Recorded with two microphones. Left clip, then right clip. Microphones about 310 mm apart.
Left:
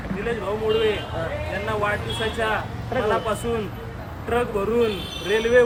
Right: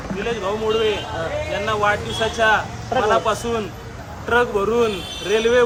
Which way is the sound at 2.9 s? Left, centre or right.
Centre.